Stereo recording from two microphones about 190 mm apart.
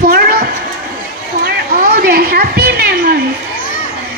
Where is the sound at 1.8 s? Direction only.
55° right (ahead or behind).